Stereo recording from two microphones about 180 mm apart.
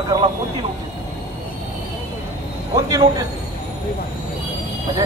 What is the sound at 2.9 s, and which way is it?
Speech, 20° right (ahead or behind).